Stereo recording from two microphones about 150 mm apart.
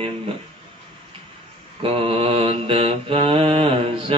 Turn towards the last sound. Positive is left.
turn(degrees=-40)  # may be behind; listen again after turning